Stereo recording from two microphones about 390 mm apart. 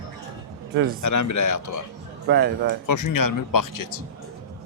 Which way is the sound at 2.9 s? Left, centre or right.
Left.